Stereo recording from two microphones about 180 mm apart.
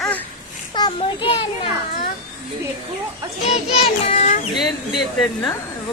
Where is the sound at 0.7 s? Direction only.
25° left (ahead or behind).